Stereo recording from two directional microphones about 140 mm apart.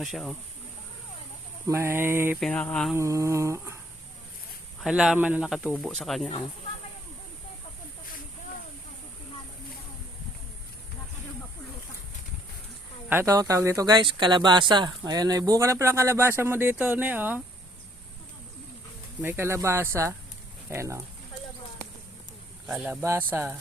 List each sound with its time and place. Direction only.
0.0 s speech: centre (ahead or behind)
1.6 s a sound: 20° right (ahead or behind)
2.4 s a sound: 10° left (ahead or behind)
2.9 s speech: 20° right (ahead or behind)
4.8 s speech: 5° right (ahead or behind)
13.1 s speech: 15° right (ahead or behind)
19.2 s speech: 15° right (ahead or behind)
22.6 s speech: 5° right (ahead or behind)
23.0 s speech: 20° right (ahead or behind)